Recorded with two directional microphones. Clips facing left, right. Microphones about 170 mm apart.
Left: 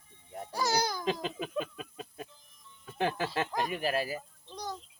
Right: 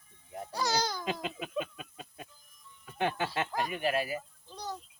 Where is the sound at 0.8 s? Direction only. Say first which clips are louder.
Left 1 dB; 15° left (ahead or behind).